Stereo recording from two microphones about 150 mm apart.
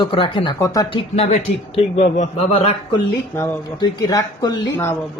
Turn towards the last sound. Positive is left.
turn(degrees=15)  # may be behind; listen again after turning